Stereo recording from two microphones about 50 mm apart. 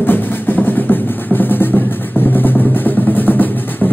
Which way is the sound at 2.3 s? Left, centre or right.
Left.